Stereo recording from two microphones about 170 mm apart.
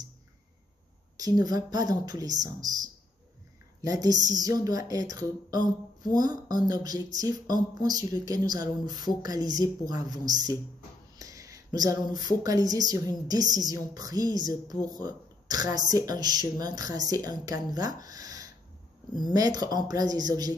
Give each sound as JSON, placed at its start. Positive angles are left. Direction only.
{"t": 1.1, "sound": "a woman's voice", "side_deg": -20}
{"t": 3.8, "sound": "a woman's voice", "side_deg": -20}